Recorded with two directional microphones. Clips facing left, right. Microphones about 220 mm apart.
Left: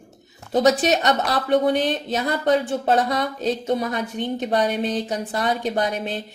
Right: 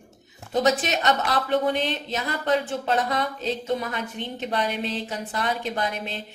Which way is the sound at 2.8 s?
35° left (ahead or behind).